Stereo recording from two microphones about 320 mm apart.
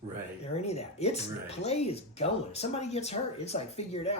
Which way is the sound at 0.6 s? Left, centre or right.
Centre.